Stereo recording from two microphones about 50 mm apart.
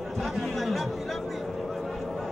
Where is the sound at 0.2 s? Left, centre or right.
Centre.